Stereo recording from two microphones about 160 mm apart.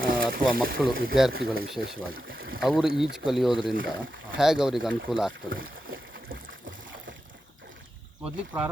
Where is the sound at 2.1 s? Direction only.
65° right (ahead or behind).